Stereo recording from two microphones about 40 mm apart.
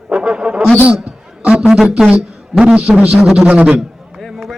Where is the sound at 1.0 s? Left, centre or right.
Right.